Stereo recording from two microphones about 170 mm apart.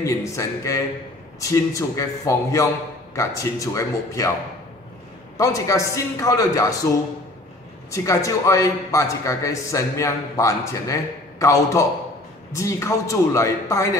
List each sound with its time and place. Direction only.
0.0 s a man's voice: 20° left (ahead or behind)
5.4 s a man's voice: 20° left (ahead or behind)
7.9 s a man's voice: 20° left (ahead or behind)